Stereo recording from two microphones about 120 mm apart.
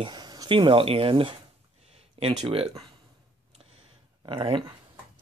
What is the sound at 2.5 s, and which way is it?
Speech, 55° right (ahead or behind).